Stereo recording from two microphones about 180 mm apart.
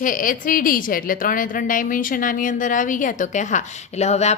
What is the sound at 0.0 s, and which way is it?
A woman's voice, 50° left (ahead or behind).